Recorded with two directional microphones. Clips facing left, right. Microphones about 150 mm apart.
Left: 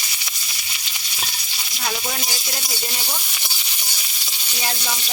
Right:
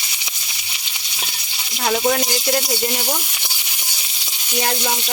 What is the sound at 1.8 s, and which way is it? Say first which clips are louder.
Speech: right 10 dB; 65° right (ahead or behind).